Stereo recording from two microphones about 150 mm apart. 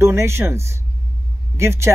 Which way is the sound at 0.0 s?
15° right (ahead or behind).